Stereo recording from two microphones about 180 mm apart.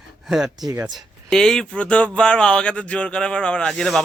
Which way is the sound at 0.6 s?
15° right (ahead or behind).